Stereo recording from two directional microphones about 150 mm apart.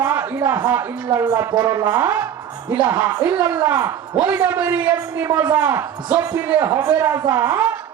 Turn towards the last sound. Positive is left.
turn(degrees=-15)  # may be behind; listen again after turning